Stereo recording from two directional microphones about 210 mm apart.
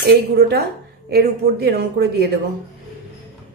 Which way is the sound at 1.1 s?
50° right (ahead or behind).